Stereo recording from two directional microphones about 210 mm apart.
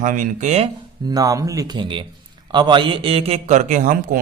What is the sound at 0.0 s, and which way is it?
Speech, 35° right (ahead or behind).